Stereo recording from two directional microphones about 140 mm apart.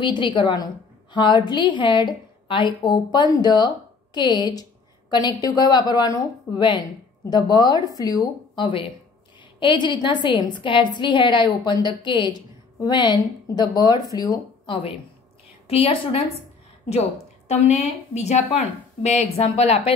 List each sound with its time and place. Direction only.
0.0 s a woman's voice: 35° left (ahead or behind)
17.5 s a woman's voice: 55° left (ahead or behind)